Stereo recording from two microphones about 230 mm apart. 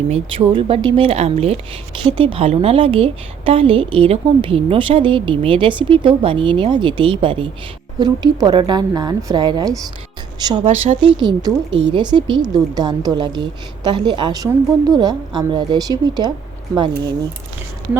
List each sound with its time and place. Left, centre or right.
0.1 s a woman's voice: right